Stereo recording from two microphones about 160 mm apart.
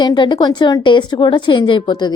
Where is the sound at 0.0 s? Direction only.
30° left (ahead or behind).